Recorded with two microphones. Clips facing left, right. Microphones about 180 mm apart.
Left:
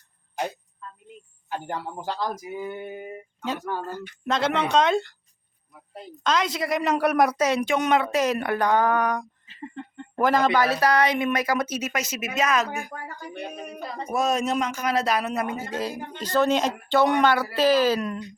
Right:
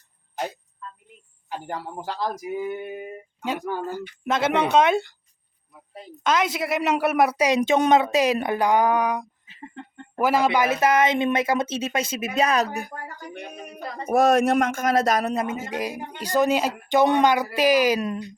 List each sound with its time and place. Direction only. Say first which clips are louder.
1.6 s speech: right 1 dB; 10° right (ahead or behind)
3.7 s speech: right 2 dB; 10° right (ahead or behind); by 12.9 s 35° right (ahead or behind)
14.1 s speech: right 6 dB; 60° right (ahead or behind); by 15.4 s 40° right (ahead or behind)
15.4 s speech: right 1 dB; 20° right (ahead or behind)